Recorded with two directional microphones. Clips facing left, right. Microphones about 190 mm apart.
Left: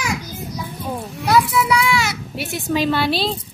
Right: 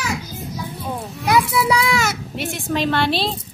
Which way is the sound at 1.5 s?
35° right (ahead or behind).